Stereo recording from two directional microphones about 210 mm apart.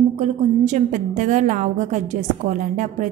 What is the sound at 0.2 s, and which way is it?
A woman's voice, 35° right (ahead or behind).